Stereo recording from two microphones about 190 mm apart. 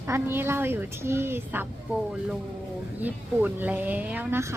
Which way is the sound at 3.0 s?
10° right (ahead or behind).